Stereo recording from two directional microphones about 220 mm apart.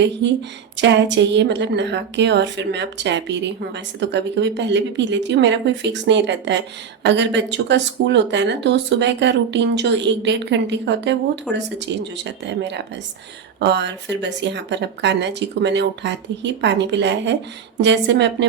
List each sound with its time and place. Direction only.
0.2 s a woman's voice: 55° right (ahead or behind)
11.5 s speech: 5° right (ahead or behind)
11.9 s a woman's voice: 55° right (ahead or behind)